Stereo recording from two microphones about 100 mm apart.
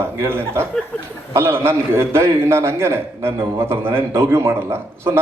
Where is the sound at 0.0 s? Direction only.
25° right (ahead or behind).